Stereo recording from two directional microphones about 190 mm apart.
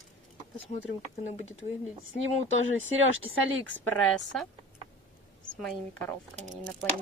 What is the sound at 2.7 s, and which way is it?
Speech, 90° right.